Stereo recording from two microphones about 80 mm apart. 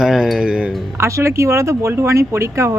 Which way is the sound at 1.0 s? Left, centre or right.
Right.